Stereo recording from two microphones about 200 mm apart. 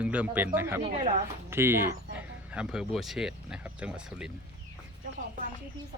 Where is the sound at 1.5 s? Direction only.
10° right (ahead or behind).